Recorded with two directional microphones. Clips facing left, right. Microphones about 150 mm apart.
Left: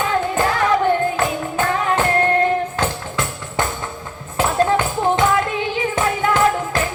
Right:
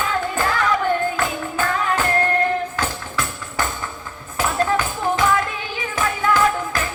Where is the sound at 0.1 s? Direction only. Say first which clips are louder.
Left 3 dB; 25° left (ahead or behind).